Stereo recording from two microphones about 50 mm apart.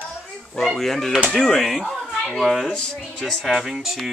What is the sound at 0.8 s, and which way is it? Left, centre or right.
Speech, centre.